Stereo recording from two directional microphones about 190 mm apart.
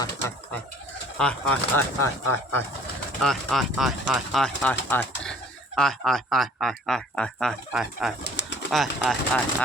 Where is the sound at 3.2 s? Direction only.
Centre (ahead or behind).